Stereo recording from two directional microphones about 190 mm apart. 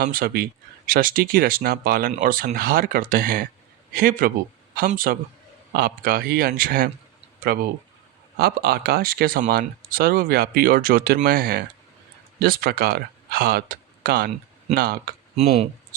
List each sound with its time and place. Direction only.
0.0 s speech: 50° right (ahead or behind)